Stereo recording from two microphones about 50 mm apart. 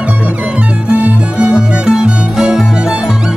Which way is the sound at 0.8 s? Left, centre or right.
Right.